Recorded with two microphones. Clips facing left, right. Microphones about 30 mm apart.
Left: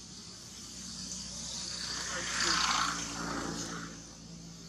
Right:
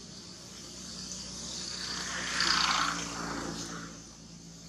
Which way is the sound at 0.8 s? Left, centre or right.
Centre.